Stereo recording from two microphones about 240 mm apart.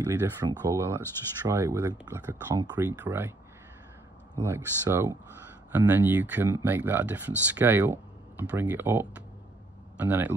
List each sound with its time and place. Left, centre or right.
0.1 s speech: centre
4.4 s a man's voice: centre